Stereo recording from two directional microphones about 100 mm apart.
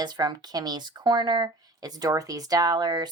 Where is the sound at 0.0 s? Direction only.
45° right (ahead or behind).